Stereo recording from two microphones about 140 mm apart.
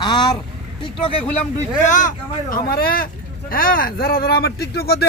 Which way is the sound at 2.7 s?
90° left.